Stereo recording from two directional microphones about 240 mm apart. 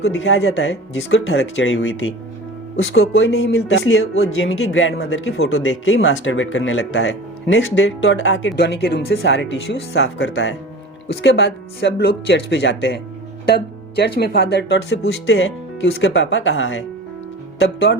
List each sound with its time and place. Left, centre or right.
0.0 s speech: left
14.0 s speech: left